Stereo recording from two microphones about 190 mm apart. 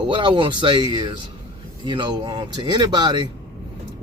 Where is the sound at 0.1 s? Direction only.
25° right (ahead or behind).